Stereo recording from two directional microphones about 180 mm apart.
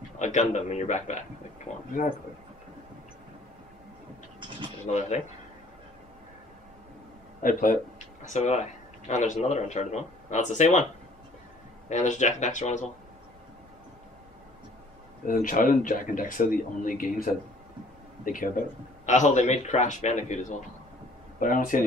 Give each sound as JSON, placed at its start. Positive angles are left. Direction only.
{"t": 0.2, "sound": "speech", "side_deg": 40}
{"t": 4.8, "sound": "speech", "side_deg": 40}
{"t": 7.4, "sound": "speech", "side_deg": 50}
{"t": 11.9, "sound": "speech", "side_deg": 40}
{"t": 15.2, "sound": "speech", "side_deg": 50}